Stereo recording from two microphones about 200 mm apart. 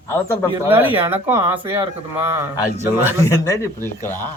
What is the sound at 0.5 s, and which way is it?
Speech, 10° right (ahead or behind).